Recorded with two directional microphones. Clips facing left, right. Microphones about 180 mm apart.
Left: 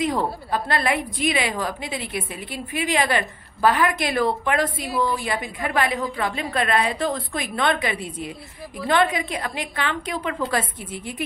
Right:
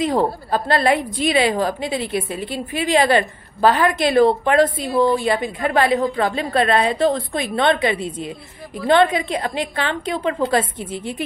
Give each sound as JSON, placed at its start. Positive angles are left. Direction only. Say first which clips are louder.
{"t": 0.0, "sound": "a woman's voice", "louder": "right 5 dB", "side_deg": -30}